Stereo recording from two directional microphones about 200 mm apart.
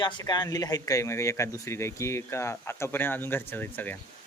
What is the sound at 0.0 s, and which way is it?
Speech, 20° left (ahead or behind).